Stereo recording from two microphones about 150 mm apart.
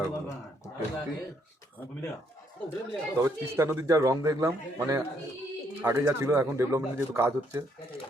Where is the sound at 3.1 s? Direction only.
20° right (ahead or behind).